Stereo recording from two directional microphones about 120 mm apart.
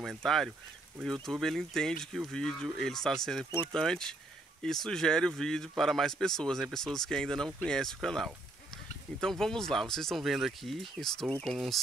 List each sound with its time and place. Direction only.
0.0 s speech: centre (ahead or behind)